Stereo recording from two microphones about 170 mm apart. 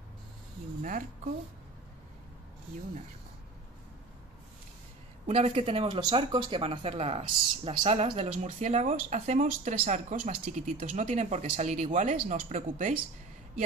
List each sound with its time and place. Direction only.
5.2 s speech: 35° right (ahead or behind)